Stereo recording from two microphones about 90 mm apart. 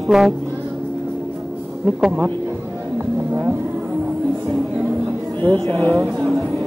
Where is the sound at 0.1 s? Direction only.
5° right (ahead or behind).